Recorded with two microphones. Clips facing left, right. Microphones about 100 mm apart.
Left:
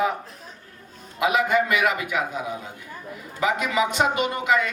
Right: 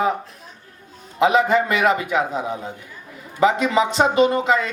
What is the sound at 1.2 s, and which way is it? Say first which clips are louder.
A man's voice: right 4 dB; 30° right (ahead or behind).